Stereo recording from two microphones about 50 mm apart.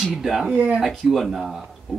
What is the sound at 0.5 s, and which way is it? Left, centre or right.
Speech, right.